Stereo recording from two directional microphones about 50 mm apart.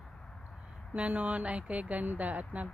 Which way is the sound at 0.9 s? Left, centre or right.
Right.